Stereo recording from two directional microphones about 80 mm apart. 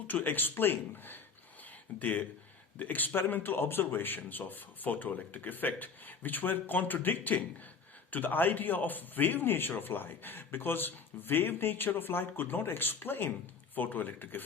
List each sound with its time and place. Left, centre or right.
0.1 s a man's voice: left
1.6 s a sound: centre
2.7 s a man's voice: left